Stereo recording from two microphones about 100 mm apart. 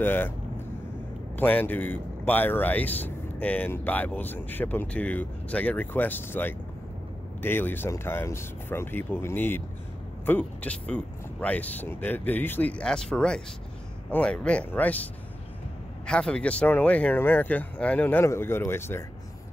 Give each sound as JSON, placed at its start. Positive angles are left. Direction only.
{"t": 0.0, "sound": "speech", "side_deg": 20}
{"t": 1.3, "sound": "a man's voice", "side_deg": 20}
{"t": 16.1, "sound": "a man's voice", "side_deg": 10}